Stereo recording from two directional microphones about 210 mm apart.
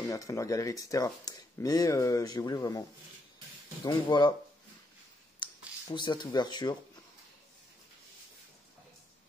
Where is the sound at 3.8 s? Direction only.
20° left (ahead or behind).